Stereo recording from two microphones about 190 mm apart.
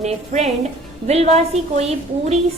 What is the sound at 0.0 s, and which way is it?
A woman's voice, 35° right (ahead or behind).